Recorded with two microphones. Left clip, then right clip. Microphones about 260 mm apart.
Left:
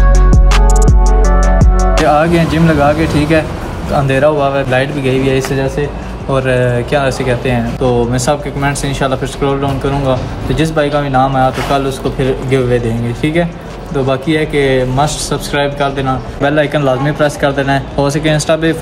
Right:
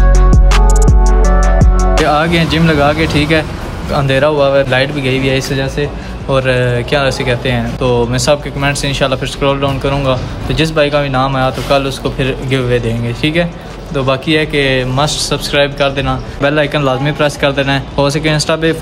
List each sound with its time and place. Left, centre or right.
0.1 s music: centre
3.9 s speech: centre